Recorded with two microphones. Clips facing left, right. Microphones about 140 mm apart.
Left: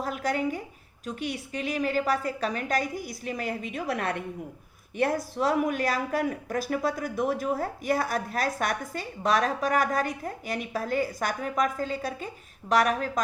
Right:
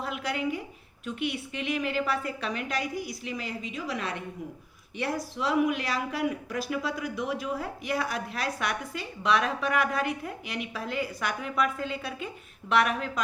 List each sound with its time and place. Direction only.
0.0 s a woman's voice: 45° left (ahead or behind)